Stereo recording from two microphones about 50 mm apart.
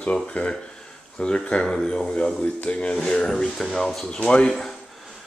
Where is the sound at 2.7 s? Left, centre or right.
Left; by 4.0 s centre.